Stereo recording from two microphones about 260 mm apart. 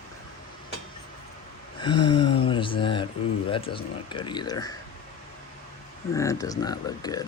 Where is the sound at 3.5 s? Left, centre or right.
Centre.